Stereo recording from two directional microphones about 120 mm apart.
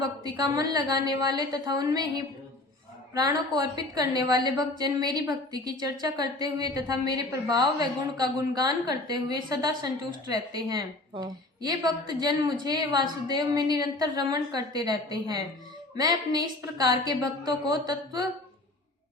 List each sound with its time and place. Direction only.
0.2 s a woman's voice: 30° right (ahead or behind)